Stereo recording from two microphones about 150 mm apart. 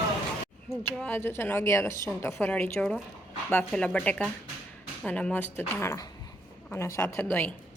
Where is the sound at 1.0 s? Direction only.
15° left (ahead or behind).